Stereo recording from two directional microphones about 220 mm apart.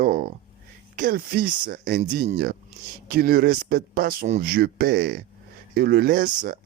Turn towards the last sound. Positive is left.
turn(degrees=-40)  # may be behind; listen again after turning